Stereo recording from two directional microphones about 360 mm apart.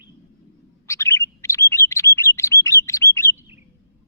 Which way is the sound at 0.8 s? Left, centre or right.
Centre.